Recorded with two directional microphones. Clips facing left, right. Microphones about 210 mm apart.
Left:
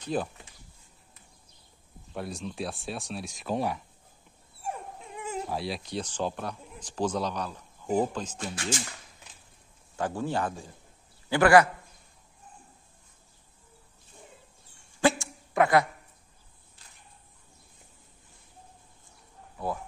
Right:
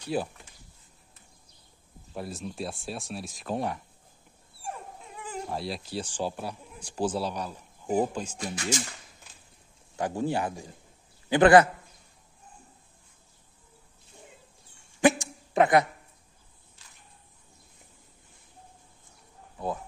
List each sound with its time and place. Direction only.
0.0 s speech: 10° right (ahead or behind)
2.1 s speech: centre (ahead or behind)
5.3 s speech: centre (ahead or behind)
9.9 s a man's voice: 15° right (ahead or behind)
15.0 s a sound: 15° right (ahead or behind)